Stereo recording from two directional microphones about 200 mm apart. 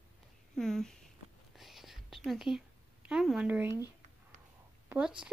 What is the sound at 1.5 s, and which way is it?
Whispering, centre (ahead or behind).